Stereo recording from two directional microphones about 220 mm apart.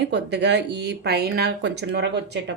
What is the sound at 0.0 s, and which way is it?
Speech, 50° right (ahead or behind).